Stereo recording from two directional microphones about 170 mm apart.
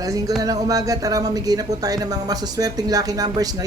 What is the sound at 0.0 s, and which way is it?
Speech, 20° right (ahead or behind).